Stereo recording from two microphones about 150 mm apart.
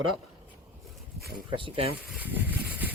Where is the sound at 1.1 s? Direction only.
90° right.